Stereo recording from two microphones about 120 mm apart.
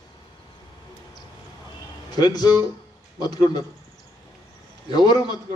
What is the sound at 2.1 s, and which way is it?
Speech, 35° left (ahead or behind).